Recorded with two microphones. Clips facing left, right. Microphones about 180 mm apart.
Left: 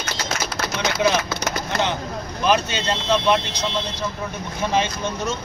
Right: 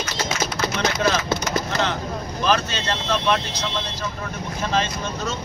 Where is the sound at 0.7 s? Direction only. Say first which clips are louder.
Left 2 dB; 10° left (ahead or behind).